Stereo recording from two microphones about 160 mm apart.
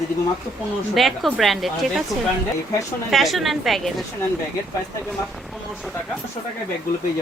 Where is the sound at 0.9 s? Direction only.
Centre (ahead or behind).